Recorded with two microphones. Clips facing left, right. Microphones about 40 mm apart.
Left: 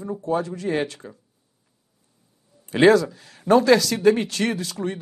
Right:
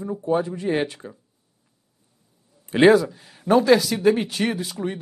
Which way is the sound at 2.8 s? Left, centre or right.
Centre.